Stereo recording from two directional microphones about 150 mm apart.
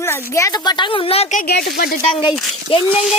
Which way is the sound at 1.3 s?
90° left.